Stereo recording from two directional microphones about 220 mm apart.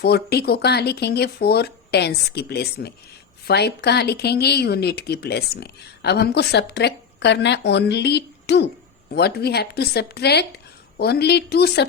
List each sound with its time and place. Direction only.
0.0 s speech: 45° left (ahead or behind)